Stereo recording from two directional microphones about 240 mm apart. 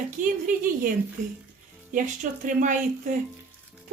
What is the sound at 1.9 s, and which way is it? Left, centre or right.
Speech, right.